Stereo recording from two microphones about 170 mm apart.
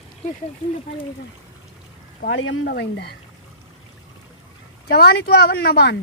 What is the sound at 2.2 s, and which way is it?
Speech, 90° left.